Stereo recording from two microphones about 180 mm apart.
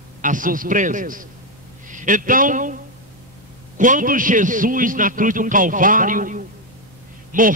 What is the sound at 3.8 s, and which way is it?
A man's voice, 45° right (ahead or behind).